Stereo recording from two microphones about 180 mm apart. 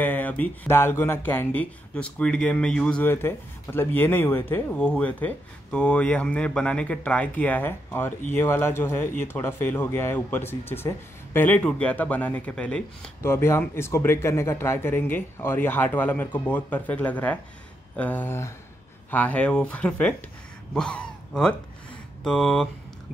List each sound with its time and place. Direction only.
0.0 s speech: 10° left (ahead or behind)